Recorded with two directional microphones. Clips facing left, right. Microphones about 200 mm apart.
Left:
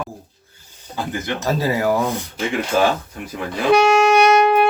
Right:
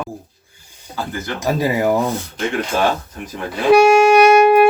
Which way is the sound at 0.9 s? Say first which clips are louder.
Left 1 dB; 15° left (ahead or behind).